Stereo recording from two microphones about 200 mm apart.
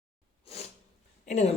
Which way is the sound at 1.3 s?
35° left (ahead or behind).